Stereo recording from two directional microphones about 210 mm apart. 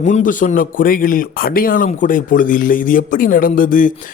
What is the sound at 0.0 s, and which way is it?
A man's voice, 35° left (ahead or behind).